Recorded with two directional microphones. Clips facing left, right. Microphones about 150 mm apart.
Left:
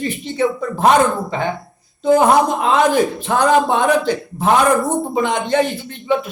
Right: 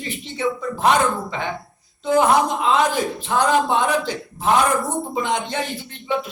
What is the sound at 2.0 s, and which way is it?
A man's voice, 45° left (ahead or behind).